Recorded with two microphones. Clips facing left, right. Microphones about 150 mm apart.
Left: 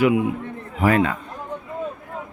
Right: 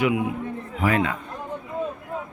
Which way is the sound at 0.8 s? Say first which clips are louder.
Left 4 dB; 45° left (ahead or behind).